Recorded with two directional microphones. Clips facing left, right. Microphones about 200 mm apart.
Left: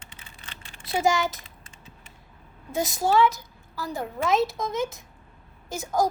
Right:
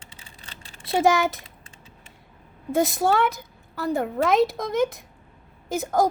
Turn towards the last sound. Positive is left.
turn(degrees=-55)  # may be behind; listen again after turning